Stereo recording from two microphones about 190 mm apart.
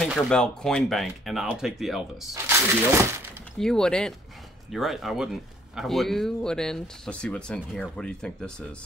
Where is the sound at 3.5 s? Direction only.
5° left (ahead or behind).